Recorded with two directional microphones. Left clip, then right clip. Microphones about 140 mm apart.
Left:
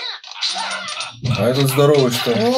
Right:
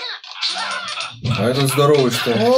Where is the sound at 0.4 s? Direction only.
5° right (ahead or behind).